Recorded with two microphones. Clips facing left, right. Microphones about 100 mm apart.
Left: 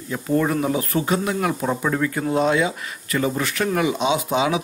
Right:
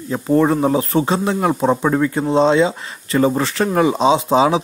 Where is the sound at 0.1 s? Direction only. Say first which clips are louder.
Right 6 dB; 30° right (ahead or behind).